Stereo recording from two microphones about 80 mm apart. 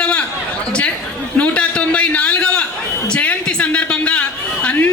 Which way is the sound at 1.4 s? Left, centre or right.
Centre.